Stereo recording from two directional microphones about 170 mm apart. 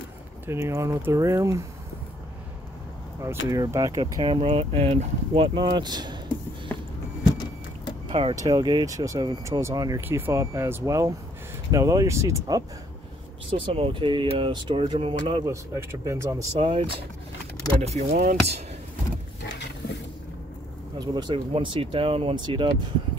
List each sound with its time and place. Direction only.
0.5 s speech: 15° right (ahead or behind)
3.4 s speech: 20° right (ahead or behind)
4.2 s speech: 35° right (ahead or behind)
8.1 s speech: 30° right (ahead or behind)
13.5 s speech: 35° right (ahead or behind); by 16.4 s 15° right (ahead or behind)
16.5 s speech: 30° right (ahead or behind)
18.1 s speech: 60° right (ahead or behind)
21.0 s speech: 25° right (ahead or behind)